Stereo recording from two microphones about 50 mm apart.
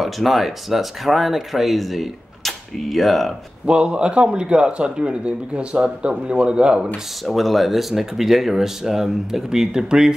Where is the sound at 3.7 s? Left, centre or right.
Right.